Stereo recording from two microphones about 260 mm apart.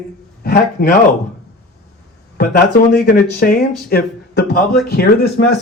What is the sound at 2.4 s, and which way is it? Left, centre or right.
Speech, left.